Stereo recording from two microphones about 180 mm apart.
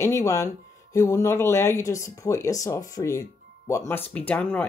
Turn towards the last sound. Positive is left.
turn(degrees=10)  # may be behind; listen again after turning